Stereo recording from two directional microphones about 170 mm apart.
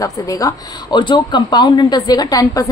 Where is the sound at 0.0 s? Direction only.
20° left (ahead or behind).